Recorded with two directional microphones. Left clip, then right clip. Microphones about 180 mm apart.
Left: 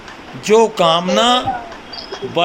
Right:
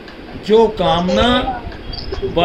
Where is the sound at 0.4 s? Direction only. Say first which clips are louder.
Left 1 dB; 15° left (ahead or behind).